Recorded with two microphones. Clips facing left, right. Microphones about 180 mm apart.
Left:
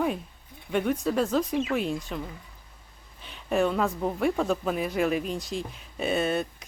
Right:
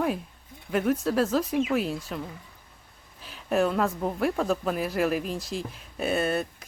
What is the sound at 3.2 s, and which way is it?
Speech, centre (ahead or behind).